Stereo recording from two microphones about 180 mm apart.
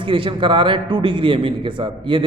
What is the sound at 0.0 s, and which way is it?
A man's voice, 30° right (ahead or behind).